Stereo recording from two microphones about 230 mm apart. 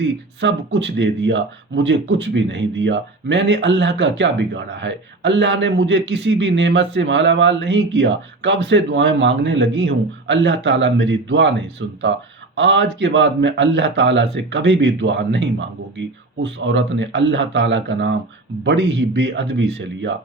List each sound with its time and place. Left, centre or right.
0.0 s speech: right
12.5 s speech: right